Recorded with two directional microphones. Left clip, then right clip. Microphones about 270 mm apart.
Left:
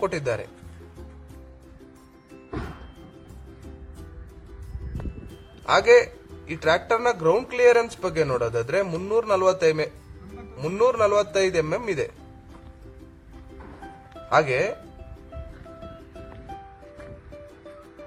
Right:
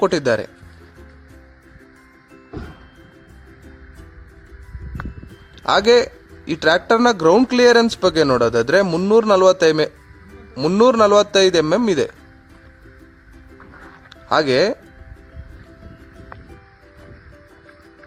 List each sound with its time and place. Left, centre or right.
0.0 s speech: right
5.6 s speech: right
14.3 s speech: right